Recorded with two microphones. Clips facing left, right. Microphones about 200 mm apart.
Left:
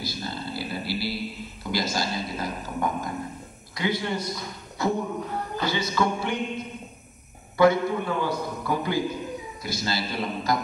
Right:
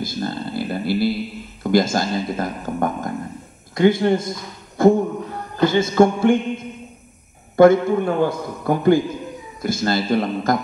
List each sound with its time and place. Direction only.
0.0 s a sound: 50° right (ahead or behind)
1.6 s speech: 50° right (ahead or behind)
7.5 s speech: 50° right (ahead or behind)